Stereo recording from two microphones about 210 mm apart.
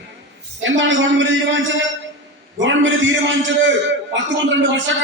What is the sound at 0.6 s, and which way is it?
Speech, 65° right (ahead or behind).